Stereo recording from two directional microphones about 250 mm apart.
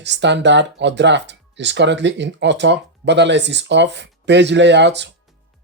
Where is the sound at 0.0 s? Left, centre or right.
Right.